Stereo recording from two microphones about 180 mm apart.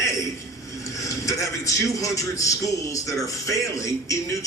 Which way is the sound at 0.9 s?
20° left (ahead or behind).